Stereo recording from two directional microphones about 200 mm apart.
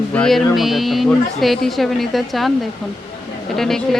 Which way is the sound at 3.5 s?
Centre (ahead or behind).